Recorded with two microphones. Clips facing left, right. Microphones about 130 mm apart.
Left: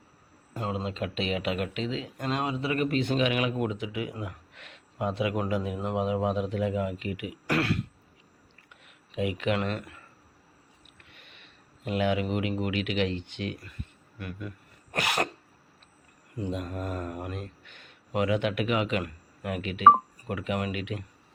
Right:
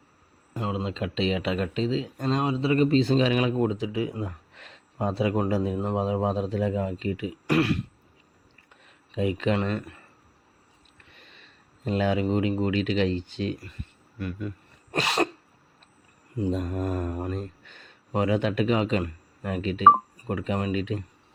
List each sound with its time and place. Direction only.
0.6 s speech: 20° right (ahead or behind)
8.7 s speech: 35° right (ahead or behind)
11.2 s a sound: 35° right (ahead or behind)
11.9 s speech: 35° right (ahead or behind)
14.9 s cough: 25° right (ahead or behind)
16.4 s speech: 40° right (ahead or behind)
17.1 s speech: 30° right (ahead or behind)